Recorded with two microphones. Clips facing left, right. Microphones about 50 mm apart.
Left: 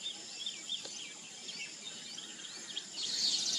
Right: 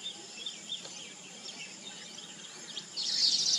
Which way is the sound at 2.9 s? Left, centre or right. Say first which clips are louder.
Right 5 dB; left.